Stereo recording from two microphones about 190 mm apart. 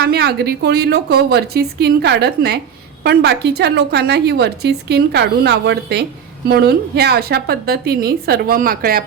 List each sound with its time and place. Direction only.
0.0 s a woman's voice: 55° right (ahead or behind)